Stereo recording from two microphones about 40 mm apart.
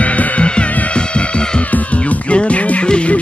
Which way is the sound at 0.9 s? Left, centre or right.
Left.